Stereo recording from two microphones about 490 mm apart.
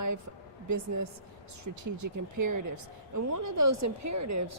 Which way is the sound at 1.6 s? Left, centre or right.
Right.